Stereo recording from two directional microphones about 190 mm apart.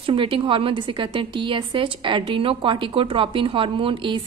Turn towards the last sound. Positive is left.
turn(degrees=-25)  # may be behind; listen again after turning